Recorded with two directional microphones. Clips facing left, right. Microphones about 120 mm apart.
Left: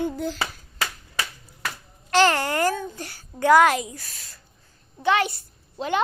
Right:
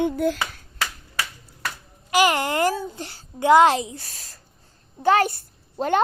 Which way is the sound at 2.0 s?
10° right (ahead or behind).